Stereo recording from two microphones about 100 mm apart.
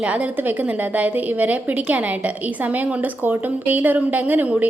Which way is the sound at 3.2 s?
15° right (ahead or behind).